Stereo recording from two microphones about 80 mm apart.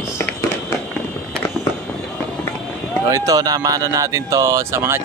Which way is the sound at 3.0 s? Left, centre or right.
Right.